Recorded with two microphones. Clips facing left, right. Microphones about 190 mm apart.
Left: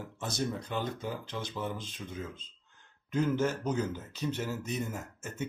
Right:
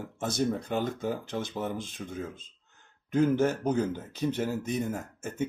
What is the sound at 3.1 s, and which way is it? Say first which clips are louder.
Speech: right 5 dB; 55° right (ahead or behind).